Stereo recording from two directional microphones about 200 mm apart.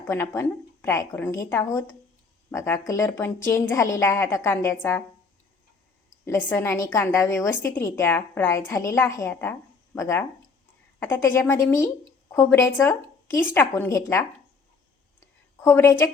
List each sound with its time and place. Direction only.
0.1 s a woman's voice: 10° left (ahead or behind)
6.2 s a woman's voice: 10° left (ahead or behind)
15.6 s a woman's voice: 10° left (ahead or behind)